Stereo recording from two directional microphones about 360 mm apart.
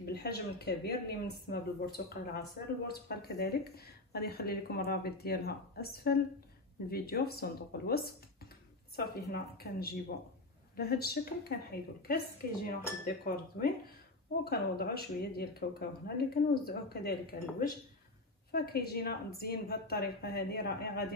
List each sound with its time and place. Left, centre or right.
0.0 s speech: left